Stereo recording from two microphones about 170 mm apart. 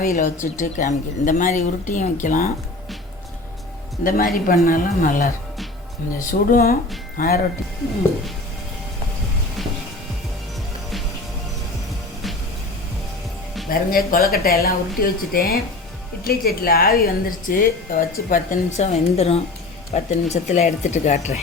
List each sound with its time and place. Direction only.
0.0 s speech: 50° left (ahead or behind)
4.0 s a woman's voice: 55° left (ahead or behind)
13.7 s a woman's voice: 55° left (ahead or behind)
18.8 s speech: 35° left (ahead or behind)